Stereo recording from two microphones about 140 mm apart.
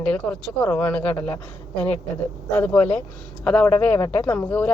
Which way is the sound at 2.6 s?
15° left (ahead or behind).